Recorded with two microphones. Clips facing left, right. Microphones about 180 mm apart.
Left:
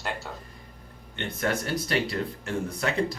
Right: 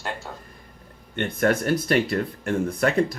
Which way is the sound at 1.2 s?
55° right (ahead or behind).